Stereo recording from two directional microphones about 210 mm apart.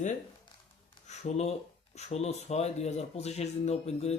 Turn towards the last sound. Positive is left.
turn(degrees=30)  # may be behind; listen again after turning